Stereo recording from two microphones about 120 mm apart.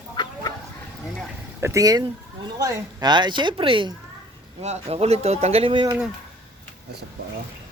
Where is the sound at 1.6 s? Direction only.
25° right (ahead or behind); by 4.0 s 45° right (ahead or behind).